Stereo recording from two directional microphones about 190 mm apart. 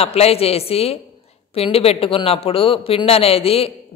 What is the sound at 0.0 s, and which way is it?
A man's voice, 30° left (ahead or behind).